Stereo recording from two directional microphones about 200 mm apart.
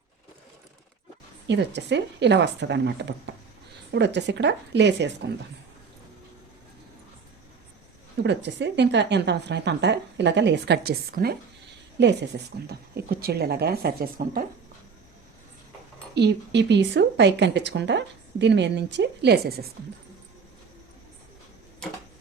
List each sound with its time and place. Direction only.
1.5 s a woman's voice: 60° right (ahead or behind)
8.2 s a woman's voice: 60° right (ahead or behind)
16.1 s a woman's voice: 60° right (ahead or behind)